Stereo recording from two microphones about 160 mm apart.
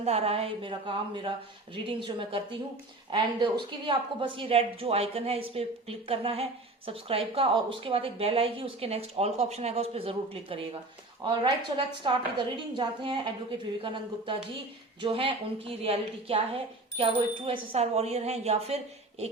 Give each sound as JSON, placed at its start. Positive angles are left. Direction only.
{"t": 0.0, "sound": "a woman's voice", "side_deg": -40}